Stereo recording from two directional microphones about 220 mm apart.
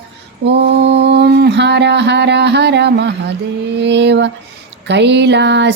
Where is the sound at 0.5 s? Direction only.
50° right (ahead or behind).